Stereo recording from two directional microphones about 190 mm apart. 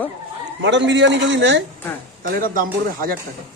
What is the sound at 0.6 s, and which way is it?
A man's voice, 70° right (ahead or behind).